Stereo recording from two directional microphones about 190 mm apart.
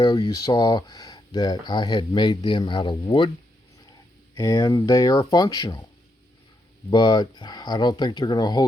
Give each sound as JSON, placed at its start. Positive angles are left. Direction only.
{"t": 0.0, "sound": "speech", "side_deg": 25}
{"t": 4.4, "sound": "speech", "side_deg": 20}
{"t": 6.9, "sound": "speech", "side_deg": 20}